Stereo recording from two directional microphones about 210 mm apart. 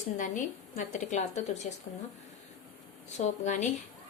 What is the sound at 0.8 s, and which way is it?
Speech, 35° left (ahead or behind).